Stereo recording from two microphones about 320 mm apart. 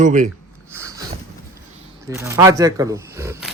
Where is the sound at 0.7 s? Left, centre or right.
Centre.